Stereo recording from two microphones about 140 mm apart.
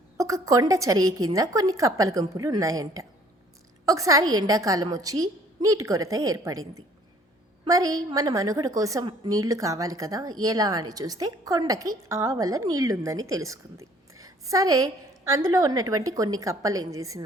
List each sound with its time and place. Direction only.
0.2 s a woman's voice: 25° right (ahead or behind)